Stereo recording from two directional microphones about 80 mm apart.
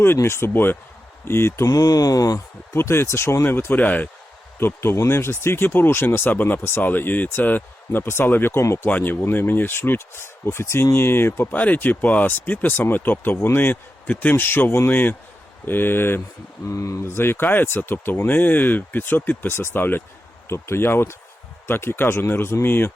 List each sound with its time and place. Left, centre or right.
0.0 s speech: left
1.6 s speech: left
2.7 s speech: left
4.6 s speech: left
8.9 s speech: left
16.6 s speech: left